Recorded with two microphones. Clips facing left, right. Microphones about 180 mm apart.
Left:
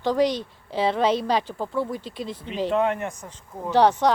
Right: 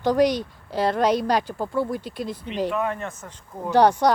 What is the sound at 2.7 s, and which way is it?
Speech, 25° left (ahead or behind).